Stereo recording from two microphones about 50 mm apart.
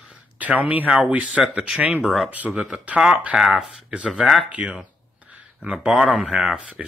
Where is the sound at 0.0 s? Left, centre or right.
Right.